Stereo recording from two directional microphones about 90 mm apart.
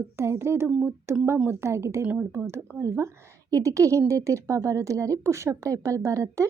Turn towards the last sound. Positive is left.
turn(degrees=-35)  # may be behind; listen again after turning